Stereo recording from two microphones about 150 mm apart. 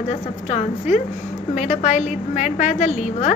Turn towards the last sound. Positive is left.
turn(degrees=50)  # may be behind; listen again after turning